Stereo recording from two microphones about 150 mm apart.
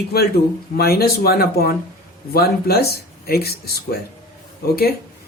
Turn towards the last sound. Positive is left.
turn(degrees=90)